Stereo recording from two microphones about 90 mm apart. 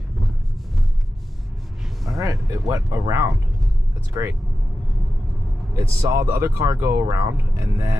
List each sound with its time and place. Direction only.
2.1 s speech: 40° right (ahead or behind)
5.8 s speech: 30° right (ahead or behind)